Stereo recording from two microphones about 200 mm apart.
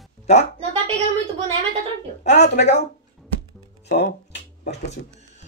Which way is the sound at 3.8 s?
55° left (ahead or behind).